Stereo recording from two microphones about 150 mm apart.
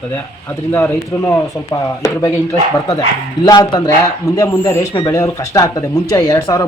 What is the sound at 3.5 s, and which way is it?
Speech, 25° left (ahead or behind).